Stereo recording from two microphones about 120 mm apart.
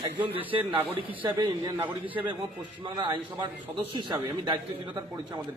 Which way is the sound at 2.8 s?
45° right (ahead or behind).